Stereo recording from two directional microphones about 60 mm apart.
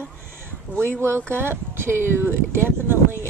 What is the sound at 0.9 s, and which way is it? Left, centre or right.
Speech, right.